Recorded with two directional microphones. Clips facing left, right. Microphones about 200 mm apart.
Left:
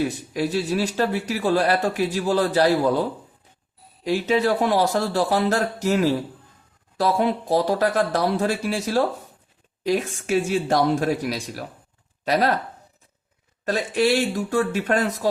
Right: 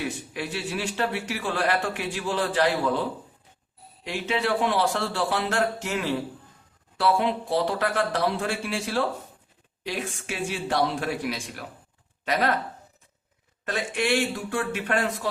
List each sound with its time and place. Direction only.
0.0 s a man's voice: 40° left (ahead or behind)
13.7 s a man's voice: 35° left (ahead or behind)